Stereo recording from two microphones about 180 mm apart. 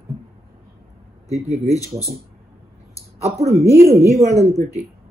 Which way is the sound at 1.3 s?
35° right (ahead or behind).